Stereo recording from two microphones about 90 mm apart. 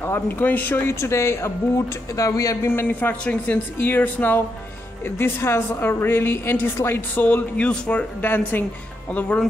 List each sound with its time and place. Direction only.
0.0 s a woman's voice: 25° left (ahead or behind)